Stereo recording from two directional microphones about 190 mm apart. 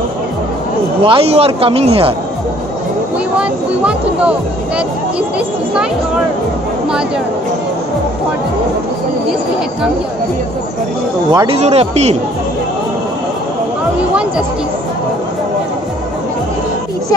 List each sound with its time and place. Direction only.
1.0 s speech: 30° right (ahead or behind)
3.3 s speech: 5° right (ahead or behind)
11.3 s speech: 30° right (ahead or behind)